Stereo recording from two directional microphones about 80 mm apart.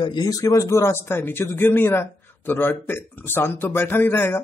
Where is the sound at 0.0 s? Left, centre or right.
Left.